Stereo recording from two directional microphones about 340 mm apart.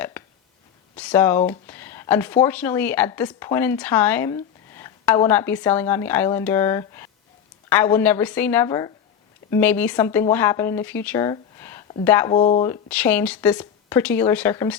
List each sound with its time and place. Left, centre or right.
0.9 s a sound: centre
1.5 s a woman's voice: centre
12.4 s a woman's voice: centre
12.9 s speech: centre